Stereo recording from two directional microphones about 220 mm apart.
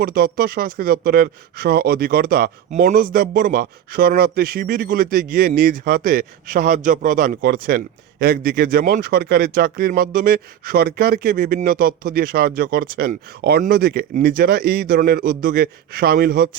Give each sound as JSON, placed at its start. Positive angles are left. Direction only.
{"t": 0.0, "sound": "speech", "side_deg": -40}